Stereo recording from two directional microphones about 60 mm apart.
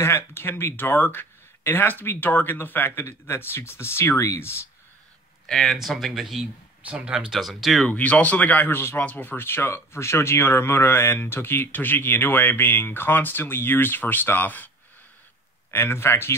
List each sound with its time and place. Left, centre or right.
0.0 s speech: left
5.5 s speech: centre
6.8 s speech: centre
7.3 s speech: centre
7.9 s speech: left
15.7 s speech: left